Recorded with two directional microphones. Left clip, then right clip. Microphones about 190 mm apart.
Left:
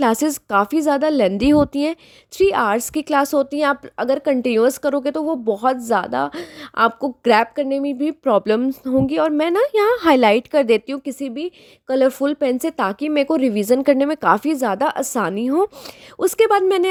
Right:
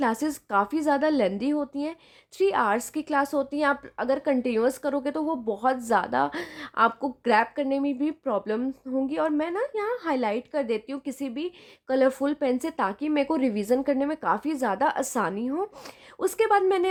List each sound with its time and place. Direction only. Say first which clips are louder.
0.0 s a woman's voice: left 8 dB; 35° left (ahead or behind)
2.4 s a woman's voice: left 7 dB; 30° left (ahead or behind)